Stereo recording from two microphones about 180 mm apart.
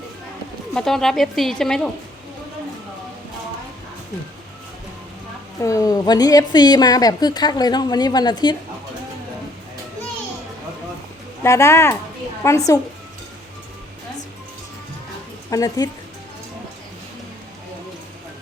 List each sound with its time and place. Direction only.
0.7 s speech: 5° left (ahead or behind)
5.6 s a woman's voice: 20° left (ahead or behind)
11.4 s speech: 15° left (ahead or behind)
15.4 s speech: 20° left (ahead or behind)